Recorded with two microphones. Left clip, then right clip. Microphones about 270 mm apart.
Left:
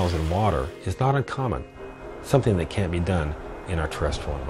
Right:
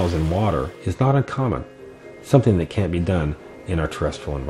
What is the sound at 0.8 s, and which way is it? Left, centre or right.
Speech, left.